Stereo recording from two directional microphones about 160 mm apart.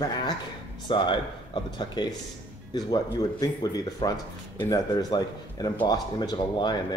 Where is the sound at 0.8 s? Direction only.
30° left (ahead or behind).